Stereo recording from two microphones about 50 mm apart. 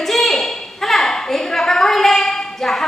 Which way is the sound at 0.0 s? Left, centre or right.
Centre.